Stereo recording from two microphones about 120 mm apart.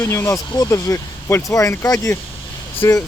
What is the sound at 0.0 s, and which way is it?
Speech, 20° left (ahead or behind).